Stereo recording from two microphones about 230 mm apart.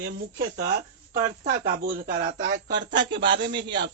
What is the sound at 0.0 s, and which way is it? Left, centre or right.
Speech, right.